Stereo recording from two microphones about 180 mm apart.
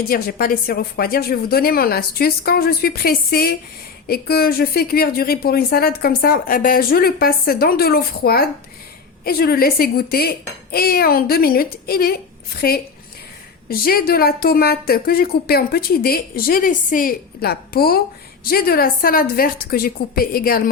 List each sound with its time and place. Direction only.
0.1 s a woman's voice: 55° left (ahead or behind)